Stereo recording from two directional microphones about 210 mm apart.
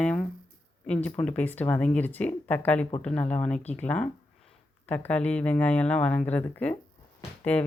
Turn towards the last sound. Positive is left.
turn(degrees=5)  # may be behind; listen again after turning